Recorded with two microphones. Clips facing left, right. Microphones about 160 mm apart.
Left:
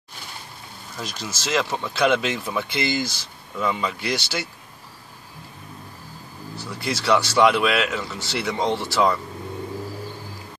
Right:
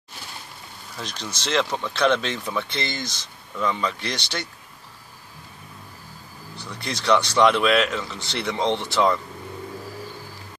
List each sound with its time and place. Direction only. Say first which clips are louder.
0.9 s speech: left 1 dB; 5° left (ahead or behind)
6.5 s speech: left 4 dB; 5° left (ahead or behind)